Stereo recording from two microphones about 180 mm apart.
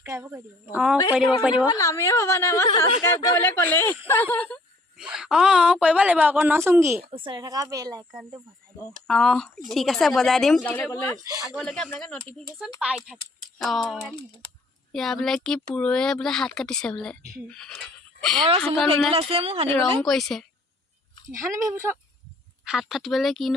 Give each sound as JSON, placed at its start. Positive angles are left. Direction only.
{"t": 0.0, "sound": "a woman's voice", "side_deg": -10}
{"t": 0.7, "sound": "a woman's voice", "side_deg": -5}
{"t": 1.8, "sound": "speech", "side_deg": 15}
{"t": 4.9, "sound": "a woman's voice", "side_deg": -5}
{"t": 7.1, "sound": "speech", "side_deg": -25}
{"t": 9.0, "sound": "speech", "side_deg": 0}
{"t": 11.4, "sound": "speech", "side_deg": 0}
{"t": 18.3, "sound": "a woman's voice", "side_deg": -30}
{"t": 20.0, "sound": "speech", "side_deg": 0}
{"t": 21.3, "sound": "a woman's voice", "side_deg": -15}
{"t": 22.6, "sound": "speech", "side_deg": -5}